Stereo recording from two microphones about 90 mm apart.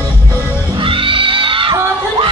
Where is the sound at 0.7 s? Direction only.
75° right (ahead or behind).